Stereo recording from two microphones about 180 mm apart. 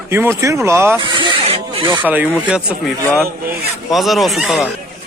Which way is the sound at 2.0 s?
10° right (ahead or behind).